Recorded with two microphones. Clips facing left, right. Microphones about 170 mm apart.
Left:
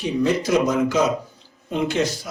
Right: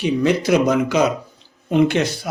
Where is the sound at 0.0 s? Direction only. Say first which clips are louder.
Right 3 dB; 70° right (ahead or behind).